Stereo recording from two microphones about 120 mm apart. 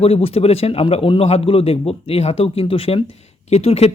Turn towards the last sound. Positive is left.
turn(degrees=60)  # may be behind; listen again after turning